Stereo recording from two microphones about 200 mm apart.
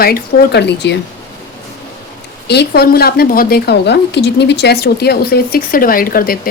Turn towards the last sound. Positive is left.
turn(degrees=45)  # may be behind; listen again after turning